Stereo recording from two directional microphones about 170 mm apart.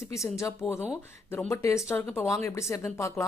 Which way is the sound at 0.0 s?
15° left (ahead or behind).